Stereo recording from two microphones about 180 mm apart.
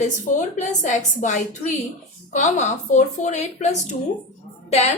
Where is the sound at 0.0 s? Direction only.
45° left (ahead or behind).